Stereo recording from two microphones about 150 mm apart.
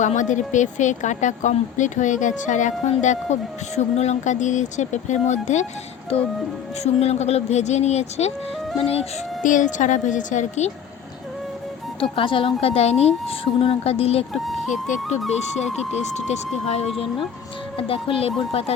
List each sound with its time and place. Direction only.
0.0 s speech: 55° left (ahead or behind)
6.8 s speech: 45° left (ahead or behind)
9.4 s speech: 60° left (ahead or behind)
12.1 s a woman's voice: 35° left (ahead or behind)
15.3 s speech: 50° left (ahead or behind)
17.7 s a woman's voice: 35° left (ahead or behind)